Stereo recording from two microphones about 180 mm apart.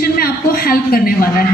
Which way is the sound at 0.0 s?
55° left (ahead or behind).